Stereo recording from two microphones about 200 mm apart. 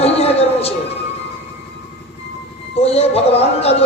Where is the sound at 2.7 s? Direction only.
30° left (ahead or behind).